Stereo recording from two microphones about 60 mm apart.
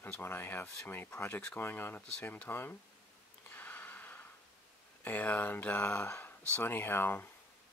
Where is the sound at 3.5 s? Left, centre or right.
Left.